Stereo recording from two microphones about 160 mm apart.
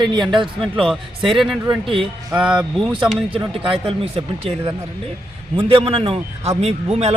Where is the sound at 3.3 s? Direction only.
35° right (ahead or behind).